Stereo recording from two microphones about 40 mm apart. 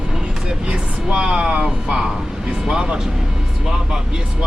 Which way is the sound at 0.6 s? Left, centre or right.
Right.